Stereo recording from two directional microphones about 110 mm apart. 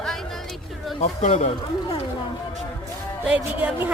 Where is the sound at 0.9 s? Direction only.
75° left (ahead or behind).